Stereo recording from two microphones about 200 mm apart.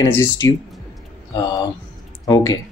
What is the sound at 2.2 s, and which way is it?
Speech, 20° left (ahead or behind).